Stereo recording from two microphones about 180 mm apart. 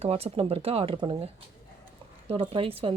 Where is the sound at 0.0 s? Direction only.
35° right (ahead or behind).